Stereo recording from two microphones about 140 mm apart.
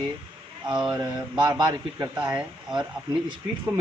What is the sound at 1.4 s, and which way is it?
Speech, 30° right (ahead or behind).